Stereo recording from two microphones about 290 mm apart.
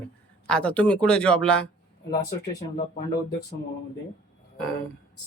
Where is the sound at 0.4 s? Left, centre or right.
Centre.